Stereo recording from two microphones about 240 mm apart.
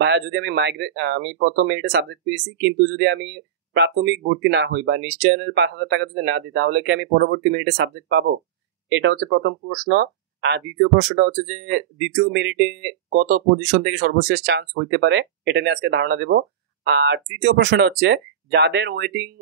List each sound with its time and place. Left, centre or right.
0.0 s speech: right